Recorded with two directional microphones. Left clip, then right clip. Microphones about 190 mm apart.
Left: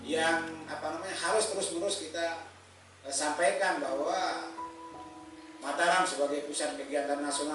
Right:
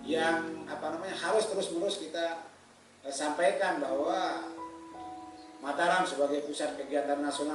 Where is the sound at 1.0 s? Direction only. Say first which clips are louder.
Even; 10° right (ahead or behind).